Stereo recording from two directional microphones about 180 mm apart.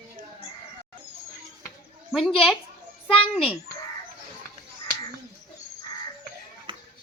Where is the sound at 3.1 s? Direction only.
30° left (ahead or behind).